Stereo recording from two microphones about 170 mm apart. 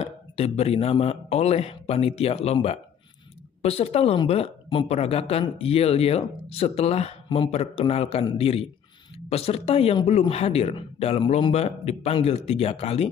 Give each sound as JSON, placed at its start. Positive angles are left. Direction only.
{"t": 0.0, "sound": "a woman's voice", "side_deg": 35}